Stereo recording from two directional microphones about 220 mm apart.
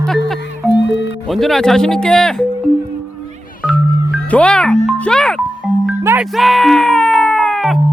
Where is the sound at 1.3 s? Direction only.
Centre (ahead or behind).